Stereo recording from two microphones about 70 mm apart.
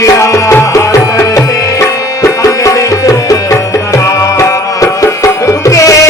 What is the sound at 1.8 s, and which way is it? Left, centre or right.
Music, left.